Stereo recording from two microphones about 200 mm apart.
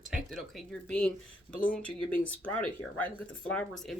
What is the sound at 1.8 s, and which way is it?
Speech, 5° left (ahead or behind).